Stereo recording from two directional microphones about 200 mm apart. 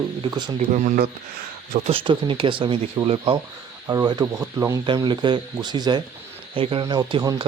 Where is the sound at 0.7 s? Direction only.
45° right (ahead or behind).